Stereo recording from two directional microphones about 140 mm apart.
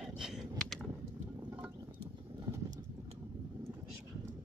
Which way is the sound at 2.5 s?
30° right (ahead or behind).